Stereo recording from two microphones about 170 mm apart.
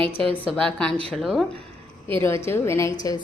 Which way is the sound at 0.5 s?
5° left (ahead or behind).